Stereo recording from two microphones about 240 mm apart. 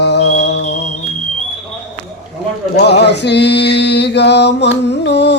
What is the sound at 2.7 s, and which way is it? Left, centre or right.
Music, left.